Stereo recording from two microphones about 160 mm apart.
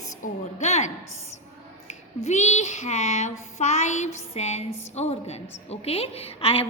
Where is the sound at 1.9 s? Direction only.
45° left (ahead or behind).